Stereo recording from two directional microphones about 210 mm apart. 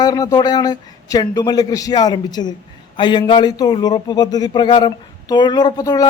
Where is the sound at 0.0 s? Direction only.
15° left (ahead or behind).